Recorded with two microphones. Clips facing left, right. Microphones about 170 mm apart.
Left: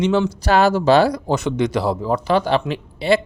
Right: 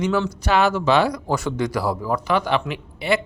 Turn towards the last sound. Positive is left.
turn(degrees=30)  # may be behind; listen again after turning